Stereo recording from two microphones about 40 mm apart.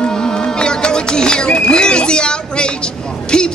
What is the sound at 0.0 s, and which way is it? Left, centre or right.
Music, left.